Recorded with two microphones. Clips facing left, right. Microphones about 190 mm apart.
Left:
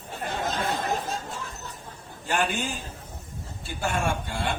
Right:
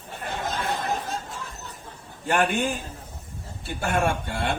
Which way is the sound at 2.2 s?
55° right (ahead or behind).